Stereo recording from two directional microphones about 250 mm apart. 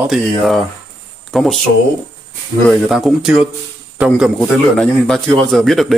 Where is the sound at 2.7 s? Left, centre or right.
Centre.